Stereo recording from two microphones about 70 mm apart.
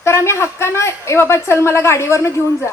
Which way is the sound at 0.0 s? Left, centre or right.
Left.